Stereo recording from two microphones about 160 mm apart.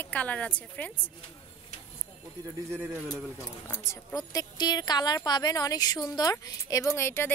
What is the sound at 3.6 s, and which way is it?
A woman's voice, 15° left (ahead or behind).